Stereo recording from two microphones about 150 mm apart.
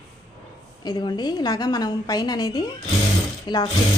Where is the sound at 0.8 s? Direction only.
30° left (ahead or behind).